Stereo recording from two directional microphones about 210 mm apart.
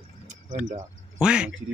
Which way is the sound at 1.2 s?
5° right (ahead or behind).